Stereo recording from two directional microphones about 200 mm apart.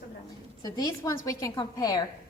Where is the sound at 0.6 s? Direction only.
20° left (ahead or behind).